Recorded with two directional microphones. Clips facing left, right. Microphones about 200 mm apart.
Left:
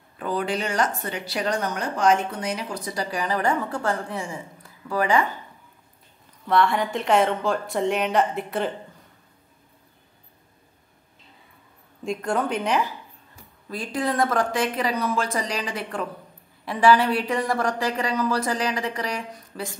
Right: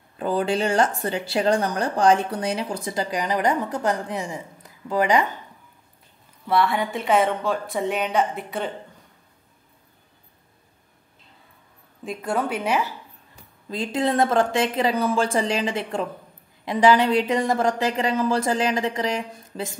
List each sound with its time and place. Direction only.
0.2 s speech: 30° right (ahead or behind)
6.4 s speech: 5° right (ahead or behind)
12.0 s speech: 5° right (ahead or behind)
13.7 s speech: 25° right (ahead or behind)